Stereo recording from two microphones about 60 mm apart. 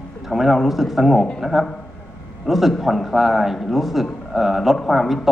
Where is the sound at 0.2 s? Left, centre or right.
Centre.